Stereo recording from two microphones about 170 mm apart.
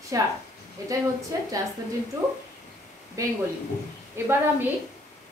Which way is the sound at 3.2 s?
20° right (ahead or behind).